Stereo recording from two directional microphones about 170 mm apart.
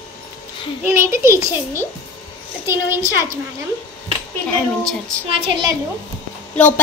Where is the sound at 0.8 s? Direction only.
15° right (ahead or behind).